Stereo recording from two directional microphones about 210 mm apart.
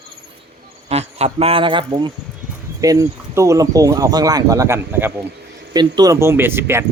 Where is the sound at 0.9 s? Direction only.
30° right (ahead or behind).